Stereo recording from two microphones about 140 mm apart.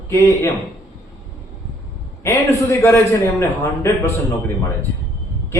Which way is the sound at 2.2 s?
20° left (ahead or behind).